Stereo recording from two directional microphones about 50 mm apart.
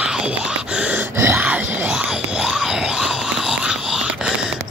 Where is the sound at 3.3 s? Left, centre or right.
Centre.